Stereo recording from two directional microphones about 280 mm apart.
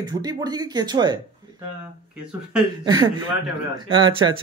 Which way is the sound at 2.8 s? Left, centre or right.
Centre.